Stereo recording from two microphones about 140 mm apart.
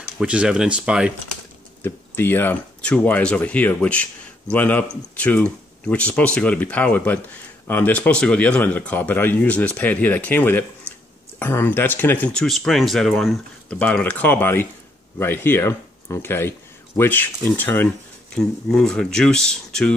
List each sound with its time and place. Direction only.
0.2 s speech: 5° right (ahead or behind)
1.8 s speech: 15° left (ahead or behind)
18.3 s speech: 5° left (ahead or behind)